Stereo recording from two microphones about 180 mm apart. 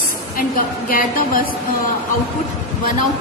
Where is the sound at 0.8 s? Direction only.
50° left (ahead or behind).